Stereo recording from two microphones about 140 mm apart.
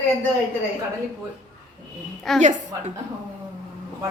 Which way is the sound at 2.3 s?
Centre (ahead or behind).